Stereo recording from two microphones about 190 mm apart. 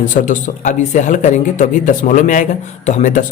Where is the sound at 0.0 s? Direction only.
45° left (ahead or behind).